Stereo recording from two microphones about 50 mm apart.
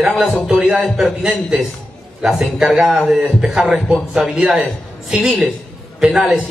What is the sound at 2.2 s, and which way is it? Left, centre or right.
A man's voice, centre.